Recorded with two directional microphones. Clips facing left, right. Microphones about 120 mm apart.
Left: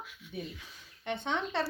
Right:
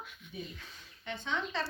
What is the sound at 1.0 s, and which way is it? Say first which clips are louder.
Speech: left 3 dB; 65° left (ahead or behind).